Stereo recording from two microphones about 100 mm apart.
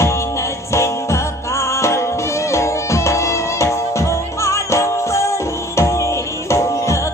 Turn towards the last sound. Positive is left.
turn(degrees=30)  # may be behind; listen again after turning